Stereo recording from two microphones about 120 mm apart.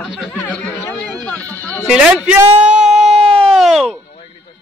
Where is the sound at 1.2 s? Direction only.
15° left (ahead or behind).